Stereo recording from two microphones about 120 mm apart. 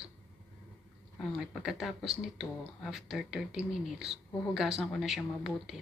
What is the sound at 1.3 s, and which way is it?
Speech, 5° right (ahead or behind).